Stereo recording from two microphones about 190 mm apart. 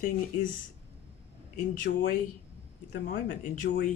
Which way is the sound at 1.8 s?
45° left (ahead or behind).